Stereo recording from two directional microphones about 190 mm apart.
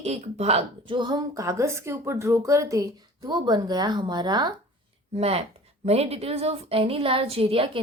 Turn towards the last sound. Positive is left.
turn(degrees=-30)  # may be behind; listen again after turning